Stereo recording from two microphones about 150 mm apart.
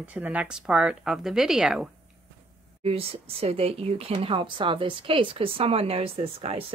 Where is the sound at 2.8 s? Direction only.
40° right (ahead or behind).